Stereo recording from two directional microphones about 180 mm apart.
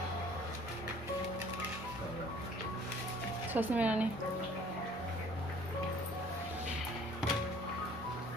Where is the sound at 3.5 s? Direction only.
10° right (ahead or behind).